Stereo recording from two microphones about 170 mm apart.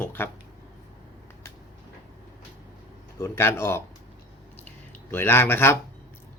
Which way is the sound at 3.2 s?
15° left (ahead or behind).